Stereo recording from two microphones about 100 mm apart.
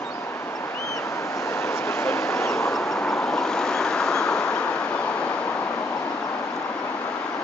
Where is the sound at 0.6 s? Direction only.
30° left (ahead or behind).